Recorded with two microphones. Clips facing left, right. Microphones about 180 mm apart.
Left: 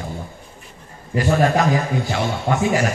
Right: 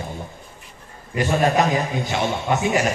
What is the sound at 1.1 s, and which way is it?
A man's voice, 20° right (ahead or behind).